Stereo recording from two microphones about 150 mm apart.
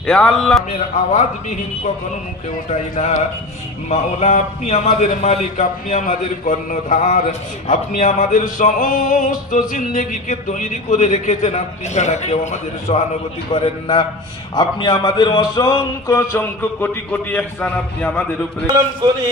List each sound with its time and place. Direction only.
0.0 s a man's voice: 5° left (ahead or behind)
2.7 s a man's voice: 50° left (ahead or behind)
13.5 s a man's voice: 35° left (ahead or behind); by 18.2 s 10° left (ahead or behind)